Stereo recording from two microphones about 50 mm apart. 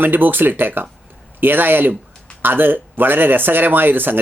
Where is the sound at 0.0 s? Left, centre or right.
Right.